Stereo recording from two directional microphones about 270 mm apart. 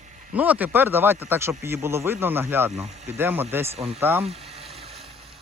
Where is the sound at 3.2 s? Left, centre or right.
Centre.